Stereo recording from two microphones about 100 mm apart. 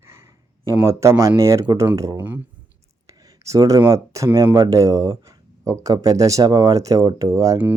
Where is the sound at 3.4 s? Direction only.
35° right (ahead or behind).